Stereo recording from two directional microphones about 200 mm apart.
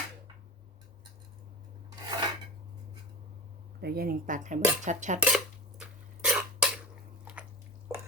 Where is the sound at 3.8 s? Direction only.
50° right (ahead or behind).